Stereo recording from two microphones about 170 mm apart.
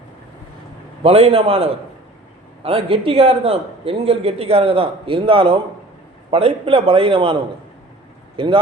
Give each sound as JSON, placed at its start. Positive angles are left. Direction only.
{"t": 1.0, "sound": "a man's voice", "side_deg": -35}
{"t": 8.4, "sound": "a man's voice", "side_deg": -30}